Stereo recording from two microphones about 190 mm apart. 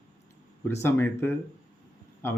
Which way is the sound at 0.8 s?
10° left (ahead or behind).